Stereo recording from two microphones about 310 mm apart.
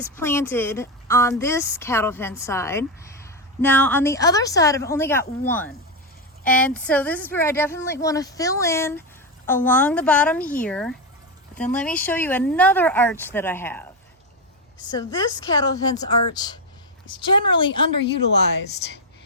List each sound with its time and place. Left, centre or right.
0.2 s a woman's voice: centre